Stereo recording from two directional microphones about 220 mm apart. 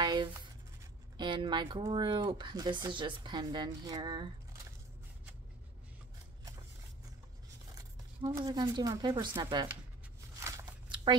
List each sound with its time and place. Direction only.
0.0 s writing: 20° right (ahead or behind)
1.1 s speech: 20° right (ahead or behind)
8.3 s speech: 15° right (ahead or behind)
10.4 s walk: 20° right (ahead or behind)